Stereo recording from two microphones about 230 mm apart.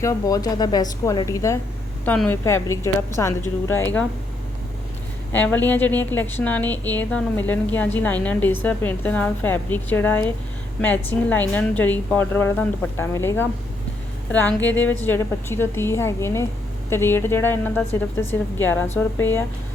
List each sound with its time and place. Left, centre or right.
0.0 s a woman's voice: centre
5.3 s a woman's voice: centre